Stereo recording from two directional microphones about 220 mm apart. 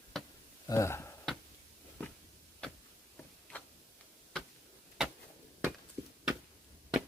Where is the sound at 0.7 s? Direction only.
15° left (ahead or behind).